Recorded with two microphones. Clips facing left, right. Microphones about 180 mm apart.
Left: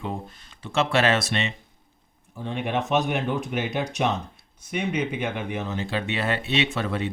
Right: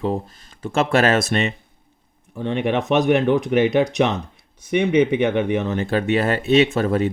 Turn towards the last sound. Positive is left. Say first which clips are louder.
# right 9 dB
turn(degrees=-45)  # may be behind; listen again after turning